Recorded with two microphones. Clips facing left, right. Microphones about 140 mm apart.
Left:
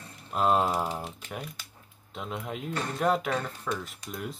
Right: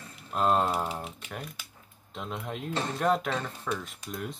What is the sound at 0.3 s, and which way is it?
Speech, 5° left (ahead or behind).